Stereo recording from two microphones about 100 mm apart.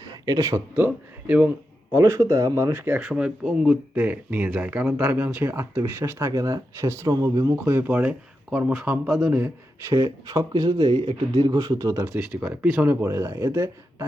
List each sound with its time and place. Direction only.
0.3 s speech: 40° right (ahead or behind)
0.5 s speech: 20° right (ahead or behind)
1.9 s speech: 30° right (ahead or behind)
3.0 s speech: 10° right (ahead or behind); by 7.5 s 30° right (ahead or behind)
7.5 s speech: 20° right (ahead or behind)
9.9 s speech: 35° right (ahead or behind)
12.5 s speech: 20° right (ahead or behind)